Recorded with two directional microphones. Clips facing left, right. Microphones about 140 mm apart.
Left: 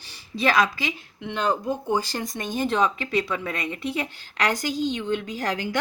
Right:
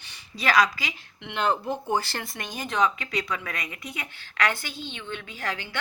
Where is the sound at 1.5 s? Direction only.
10° left (ahead or behind).